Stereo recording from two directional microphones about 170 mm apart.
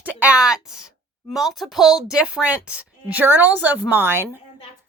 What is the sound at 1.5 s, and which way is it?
A woman's voice, centre (ahead or behind).